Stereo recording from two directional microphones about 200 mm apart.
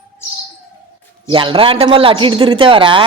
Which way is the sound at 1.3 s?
25° right (ahead or behind).